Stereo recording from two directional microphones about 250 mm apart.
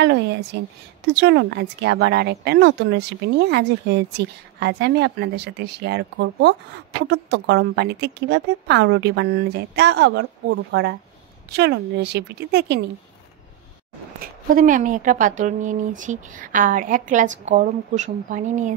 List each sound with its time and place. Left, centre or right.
0.0 s speech: right
14.2 s speech: right